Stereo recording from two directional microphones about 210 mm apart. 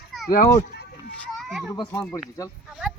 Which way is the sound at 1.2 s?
Centre (ahead or behind).